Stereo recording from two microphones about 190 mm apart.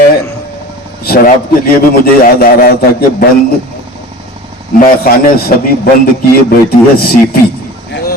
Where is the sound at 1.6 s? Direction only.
50° left (ahead or behind).